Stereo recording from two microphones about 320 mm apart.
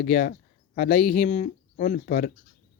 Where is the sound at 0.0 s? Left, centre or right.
Left.